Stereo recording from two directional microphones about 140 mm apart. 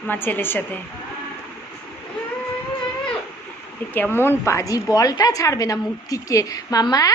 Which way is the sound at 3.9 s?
15° left (ahead or behind).